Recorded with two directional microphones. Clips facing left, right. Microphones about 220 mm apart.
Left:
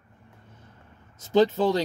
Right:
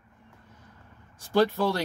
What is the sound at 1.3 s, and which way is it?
Speech, 20° left (ahead or behind).